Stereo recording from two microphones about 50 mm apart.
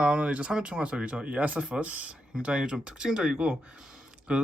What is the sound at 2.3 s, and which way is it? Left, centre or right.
Speech, centre.